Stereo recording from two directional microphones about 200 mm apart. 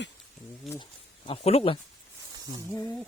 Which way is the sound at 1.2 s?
30° left (ahead or behind).